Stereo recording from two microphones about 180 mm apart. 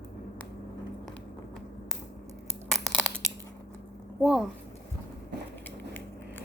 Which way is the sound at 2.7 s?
Centre (ahead or behind).